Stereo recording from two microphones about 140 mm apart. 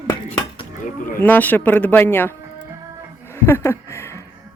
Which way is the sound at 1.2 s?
15° left (ahead or behind).